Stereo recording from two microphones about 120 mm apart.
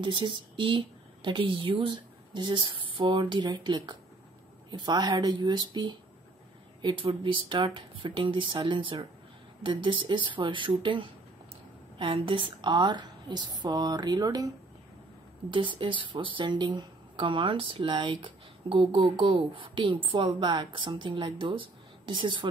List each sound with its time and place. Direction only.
0.0 s a woman's voice: 40° right (ahead or behind)
15.5 s speech: 45° right (ahead or behind)